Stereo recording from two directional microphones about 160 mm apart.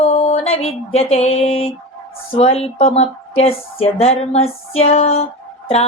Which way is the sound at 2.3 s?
40° left (ahead or behind).